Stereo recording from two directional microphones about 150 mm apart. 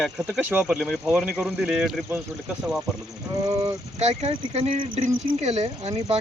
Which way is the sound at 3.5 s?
45° right (ahead or behind).